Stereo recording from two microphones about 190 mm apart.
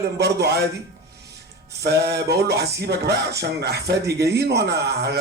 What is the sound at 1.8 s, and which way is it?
Speech, 60° right (ahead or behind).